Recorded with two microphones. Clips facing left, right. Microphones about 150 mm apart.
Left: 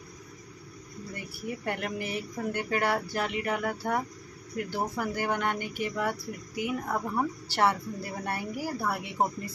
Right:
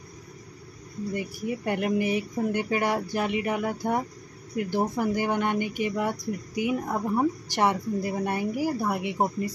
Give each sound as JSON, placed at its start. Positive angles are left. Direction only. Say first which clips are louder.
{"t": 1.1, "sound": "speech", "louder": "right 6 dB", "side_deg": -20}